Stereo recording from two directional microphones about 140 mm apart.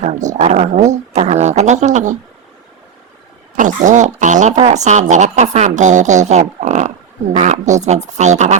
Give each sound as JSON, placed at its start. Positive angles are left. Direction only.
{"t": 0.0, "sound": "speech", "side_deg": -60}
{"t": 3.5, "sound": "speech", "side_deg": -65}
{"t": 6.6, "sound": "a sound", "side_deg": -60}
{"t": 7.3, "sound": "speech", "side_deg": -60}